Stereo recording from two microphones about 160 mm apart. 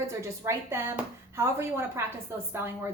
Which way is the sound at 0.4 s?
15° right (ahead or behind).